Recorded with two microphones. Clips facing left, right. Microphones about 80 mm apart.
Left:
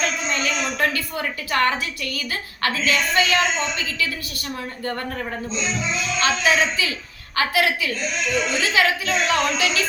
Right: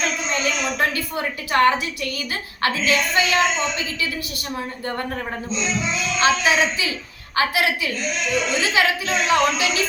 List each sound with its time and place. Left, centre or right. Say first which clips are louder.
0.3 s a sound: right 1 dB; right
2.1 s a woman's voice: even; right
6.1 s a woman's voice: right 2 dB; right